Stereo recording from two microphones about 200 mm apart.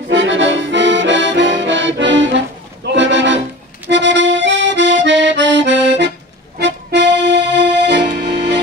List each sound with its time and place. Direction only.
0.1 s accordion: 65° right (ahead or behind)